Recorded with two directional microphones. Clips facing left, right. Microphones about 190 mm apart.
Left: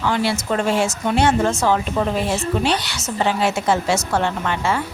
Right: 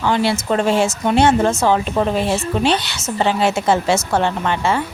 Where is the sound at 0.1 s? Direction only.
25° right (ahead or behind).